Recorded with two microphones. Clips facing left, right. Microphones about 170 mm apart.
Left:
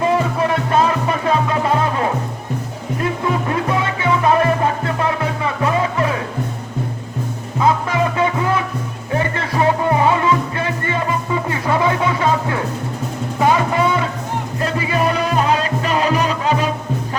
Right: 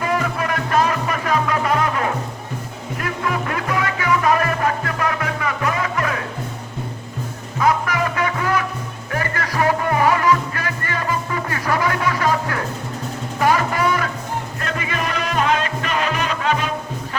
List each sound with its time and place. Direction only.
0.0 s music: 25° left (ahead or behind)
7.6 s music: 25° left (ahead or behind)